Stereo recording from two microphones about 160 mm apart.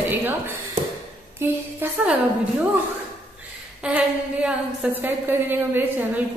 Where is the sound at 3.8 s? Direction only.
10° right (ahead or behind).